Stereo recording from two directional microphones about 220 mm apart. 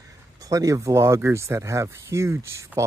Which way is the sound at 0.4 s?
15° right (ahead or behind).